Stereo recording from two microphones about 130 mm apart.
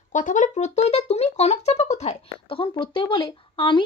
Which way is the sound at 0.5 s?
55° left (ahead or behind).